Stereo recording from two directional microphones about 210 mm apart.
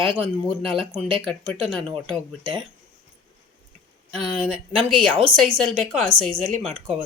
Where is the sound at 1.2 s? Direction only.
5° left (ahead or behind).